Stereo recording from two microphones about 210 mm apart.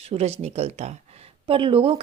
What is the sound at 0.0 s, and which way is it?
Speech, 30° right (ahead or behind).